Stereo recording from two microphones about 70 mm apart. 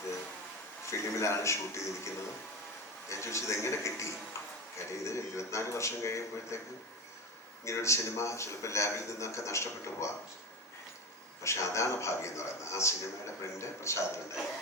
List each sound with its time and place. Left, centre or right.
0.9 s a man's voice: left
3.1 s a man's voice: left
7.6 s a man's voice: left
11.4 s a man's voice: left